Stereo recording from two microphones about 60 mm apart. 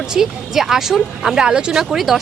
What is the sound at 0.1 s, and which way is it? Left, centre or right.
Speech, centre.